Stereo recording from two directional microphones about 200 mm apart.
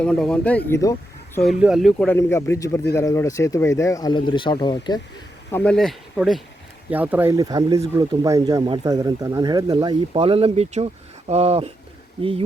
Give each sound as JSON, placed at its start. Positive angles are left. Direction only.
{"t": 0.0, "sound": "speech", "side_deg": 5}
{"t": 0.7, "sound": "speech", "side_deg": 15}
{"t": 1.4, "sound": "speech", "side_deg": 0}
{"t": 2.1, "sound": "speech", "side_deg": 15}
{"t": 5.5, "sound": "speech", "side_deg": 10}